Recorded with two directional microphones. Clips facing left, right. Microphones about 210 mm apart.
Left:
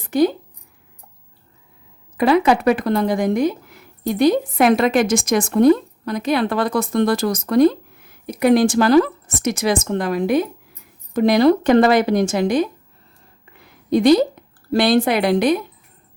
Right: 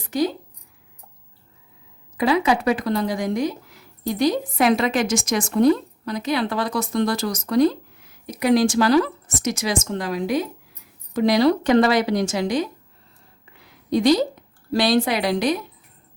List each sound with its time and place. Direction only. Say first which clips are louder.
0.1 s speech: left 6 dB; 60° left (ahead or behind)
2.1 s speech: left 4 dB; 55° left (ahead or behind)
13.4 s a sound: left 3 dB; 55° left (ahead or behind)
14.7 s speech: left 3 dB; 55° left (ahead or behind)